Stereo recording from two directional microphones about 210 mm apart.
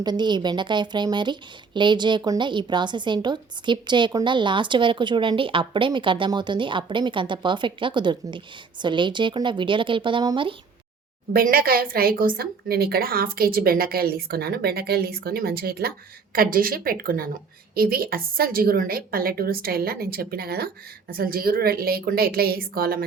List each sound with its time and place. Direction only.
0.0 s speech: 20° right (ahead or behind)
11.3 s a woman's voice: 45° right (ahead or behind)